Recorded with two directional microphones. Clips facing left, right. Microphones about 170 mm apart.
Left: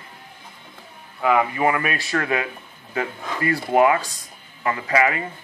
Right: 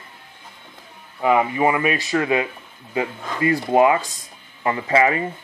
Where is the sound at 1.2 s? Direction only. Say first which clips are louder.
Right 2 dB; 20° right (ahead or behind).